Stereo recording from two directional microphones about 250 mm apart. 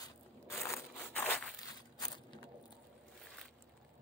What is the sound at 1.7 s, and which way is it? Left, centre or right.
Walk, centre.